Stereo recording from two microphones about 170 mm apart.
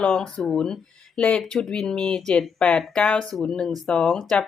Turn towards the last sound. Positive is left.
turn(degrees=5)  # may be behind; listen again after turning